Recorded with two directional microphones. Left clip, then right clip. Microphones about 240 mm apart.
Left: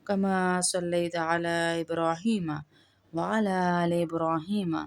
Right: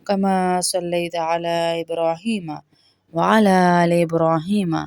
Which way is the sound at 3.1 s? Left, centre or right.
Right.